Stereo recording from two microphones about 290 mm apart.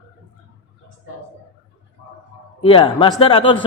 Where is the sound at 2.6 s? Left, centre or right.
Centre.